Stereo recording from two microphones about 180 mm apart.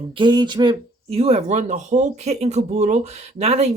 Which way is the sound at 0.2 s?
25° right (ahead or behind).